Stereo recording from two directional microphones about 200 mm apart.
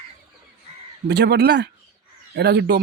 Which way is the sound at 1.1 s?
55° right (ahead or behind).